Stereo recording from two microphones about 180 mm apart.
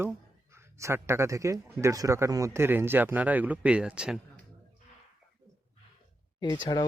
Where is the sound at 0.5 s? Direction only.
15° right (ahead or behind).